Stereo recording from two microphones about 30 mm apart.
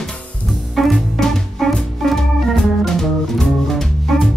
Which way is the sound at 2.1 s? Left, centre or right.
Centre.